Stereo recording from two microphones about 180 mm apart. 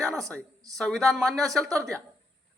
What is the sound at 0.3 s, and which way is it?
Speech, 20° right (ahead or behind).